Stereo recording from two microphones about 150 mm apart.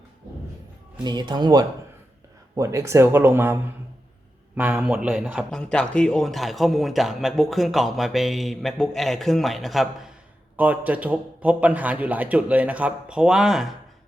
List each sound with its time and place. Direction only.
1.0 s a man's voice: 30° right (ahead or behind); by 13.7 s centre (ahead or behind)